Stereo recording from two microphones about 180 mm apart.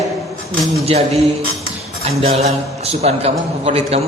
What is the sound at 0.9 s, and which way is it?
A man's voice, 35° right (ahead or behind).